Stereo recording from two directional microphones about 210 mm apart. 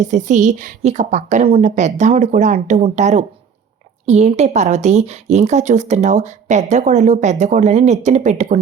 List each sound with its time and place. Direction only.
0.0 s speech: 35° right (ahead or behind)